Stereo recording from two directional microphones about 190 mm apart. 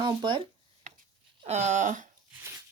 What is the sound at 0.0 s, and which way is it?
Speech, 25° right (ahead or behind).